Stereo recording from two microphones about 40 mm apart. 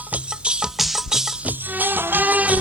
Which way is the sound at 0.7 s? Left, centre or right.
Centre.